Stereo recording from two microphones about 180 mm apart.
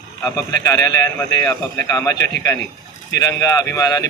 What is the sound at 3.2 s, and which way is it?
Speech, 20° left (ahead or behind).